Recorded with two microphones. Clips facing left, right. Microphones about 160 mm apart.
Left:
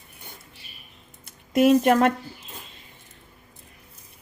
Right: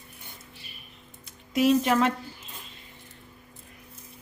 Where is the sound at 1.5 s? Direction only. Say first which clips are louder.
Left 4 dB; 50° left (ahead or behind).